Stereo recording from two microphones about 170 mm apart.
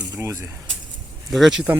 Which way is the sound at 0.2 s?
15° right (ahead or behind).